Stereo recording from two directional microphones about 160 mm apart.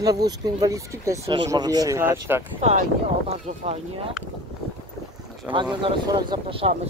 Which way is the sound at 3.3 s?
40° right (ahead or behind).